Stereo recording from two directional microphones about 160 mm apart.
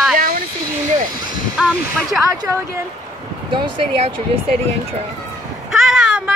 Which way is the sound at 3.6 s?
35° right (ahead or behind).